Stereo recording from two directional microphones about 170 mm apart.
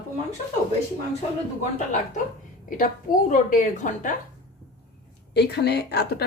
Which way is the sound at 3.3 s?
50° left (ahead or behind).